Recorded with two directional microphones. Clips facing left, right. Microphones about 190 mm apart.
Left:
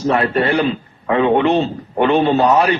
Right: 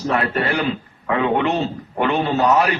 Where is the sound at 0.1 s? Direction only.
30° left (ahead or behind).